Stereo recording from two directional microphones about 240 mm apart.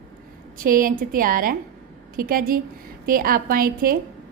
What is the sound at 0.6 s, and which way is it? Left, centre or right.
A woman's voice, right.